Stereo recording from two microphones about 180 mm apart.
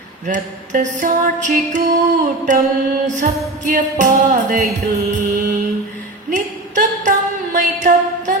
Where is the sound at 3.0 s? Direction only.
45° right (ahead or behind).